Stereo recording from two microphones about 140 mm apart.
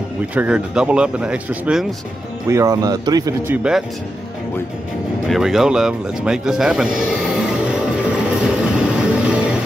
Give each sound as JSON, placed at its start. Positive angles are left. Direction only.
{"t": 0.3, "sound": "speech", "side_deg": -10}
{"t": 2.5, "sound": "speech", "side_deg": -25}
{"t": 3.4, "sound": "speech", "side_deg": -10}
{"t": 5.3, "sound": "music", "side_deg": 0}